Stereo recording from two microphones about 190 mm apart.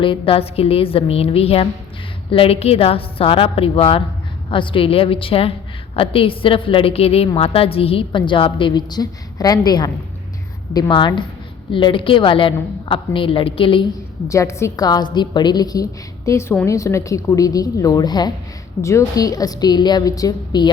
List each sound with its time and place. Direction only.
0.0 s a woman's voice: 30° left (ahead or behind)
14.3 s a woman's voice: 15° left (ahead or behind)